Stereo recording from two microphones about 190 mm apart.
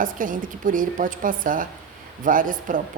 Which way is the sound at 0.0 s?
45° right (ahead or behind).